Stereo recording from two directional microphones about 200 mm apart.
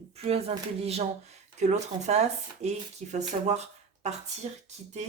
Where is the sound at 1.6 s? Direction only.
35° right (ahead or behind).